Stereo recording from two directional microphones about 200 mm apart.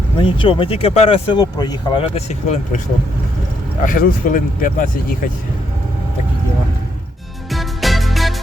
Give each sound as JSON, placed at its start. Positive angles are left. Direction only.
{"t": 0.2, "sound": "speech", "side_deg": 25}
{"t": 3.8, "sound": "speech", "side_deg": 45}
{"t": 7.5, "sound": "music", "side_deg": 0}